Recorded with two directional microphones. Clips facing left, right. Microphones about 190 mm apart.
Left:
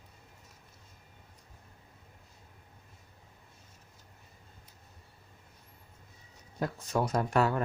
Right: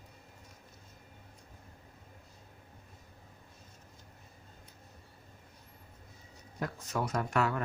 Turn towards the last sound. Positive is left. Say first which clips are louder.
# left 3 dB
turn(degrees=35)  # may be behind; listen again after turning